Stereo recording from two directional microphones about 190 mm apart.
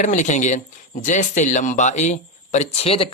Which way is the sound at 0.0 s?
40° left (ahead or behind).